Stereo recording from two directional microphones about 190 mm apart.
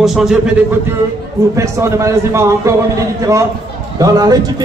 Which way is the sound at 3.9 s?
20° right (ahead or behind).